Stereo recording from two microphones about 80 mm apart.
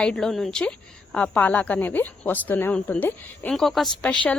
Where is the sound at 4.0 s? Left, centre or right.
Centre.